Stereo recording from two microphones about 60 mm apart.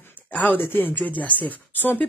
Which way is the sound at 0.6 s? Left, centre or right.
Left.